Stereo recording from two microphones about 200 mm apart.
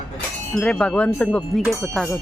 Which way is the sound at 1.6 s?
5° right (ahead or behind).